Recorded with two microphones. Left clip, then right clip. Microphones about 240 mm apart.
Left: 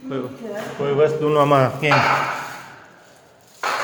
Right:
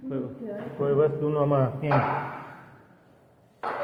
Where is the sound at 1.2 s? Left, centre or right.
Left.